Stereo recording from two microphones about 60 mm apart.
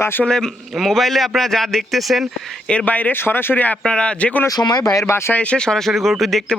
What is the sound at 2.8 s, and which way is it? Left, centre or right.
Speech, left.